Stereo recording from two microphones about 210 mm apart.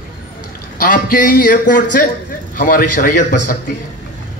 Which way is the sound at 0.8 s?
40° left (ahead or behind).